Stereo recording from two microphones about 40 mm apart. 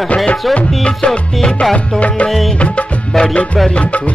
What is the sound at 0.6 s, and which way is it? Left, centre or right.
Music, left.